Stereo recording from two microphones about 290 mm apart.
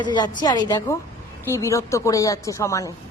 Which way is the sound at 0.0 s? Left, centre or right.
Centre.